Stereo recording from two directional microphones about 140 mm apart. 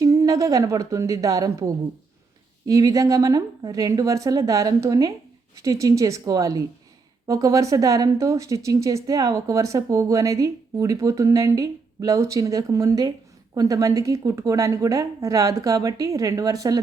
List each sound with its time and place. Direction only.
0.0 s a woman's voice: 25° right (ahead or behind)